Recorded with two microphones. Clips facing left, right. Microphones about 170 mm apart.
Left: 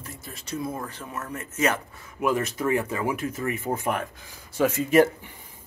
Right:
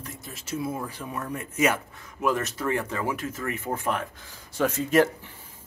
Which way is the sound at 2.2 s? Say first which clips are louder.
Left 2 dB; 10° left (ahead or behind).